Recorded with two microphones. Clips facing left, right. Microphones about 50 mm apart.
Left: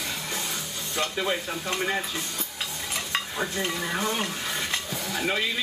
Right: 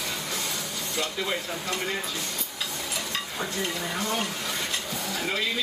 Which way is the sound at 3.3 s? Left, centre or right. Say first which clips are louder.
Even; left.